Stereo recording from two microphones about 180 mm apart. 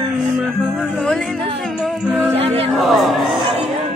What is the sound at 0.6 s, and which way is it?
Music, 5° left (ahead or behind).